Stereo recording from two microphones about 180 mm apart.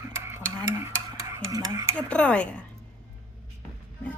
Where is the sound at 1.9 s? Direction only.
5° left (ahead or behind).